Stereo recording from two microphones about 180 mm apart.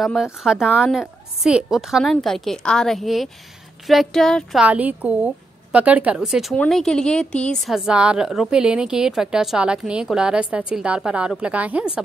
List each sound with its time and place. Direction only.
0.0 s speech: centre (ahead or behind)